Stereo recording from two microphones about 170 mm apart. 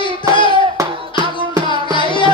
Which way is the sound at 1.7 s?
30° left (ahead or behind).